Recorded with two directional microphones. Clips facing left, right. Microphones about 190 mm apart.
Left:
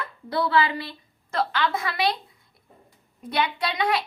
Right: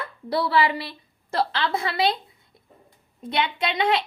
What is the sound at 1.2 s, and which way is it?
Speech, 30° right (ahead or behind).